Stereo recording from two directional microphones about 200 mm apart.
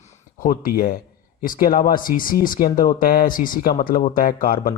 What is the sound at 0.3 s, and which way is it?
Speech, 45° left (ahead or behind).